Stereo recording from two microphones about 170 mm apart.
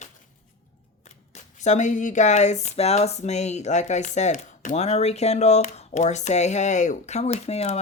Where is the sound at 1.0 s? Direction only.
40° left (ahead or behind).